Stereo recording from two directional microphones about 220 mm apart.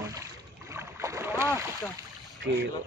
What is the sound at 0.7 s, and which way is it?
Boat, 15° right (ahead or behind).